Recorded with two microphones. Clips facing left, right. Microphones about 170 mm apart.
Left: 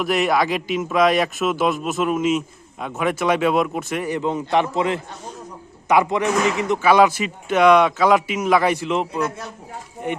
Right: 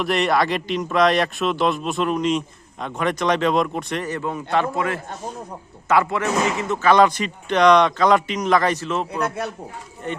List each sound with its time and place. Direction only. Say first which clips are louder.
0.0 s a man's voice: left 1 dB; centre (ahead or behind)
4.2 s a man's voice: left 3 dB; 20° left (ahead or behind)
9.2 s speech: right 2 dB; 60° right (ahead or behind)
10.0 s speech: left 3 dB; 10° left (ahead or behind)